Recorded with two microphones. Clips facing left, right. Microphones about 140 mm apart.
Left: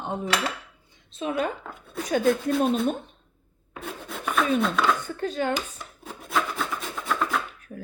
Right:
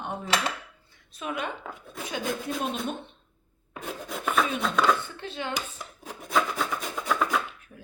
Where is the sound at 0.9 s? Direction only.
20° left (ahead or behind).